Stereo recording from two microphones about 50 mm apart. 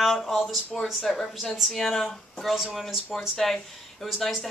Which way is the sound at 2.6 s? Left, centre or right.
Centre.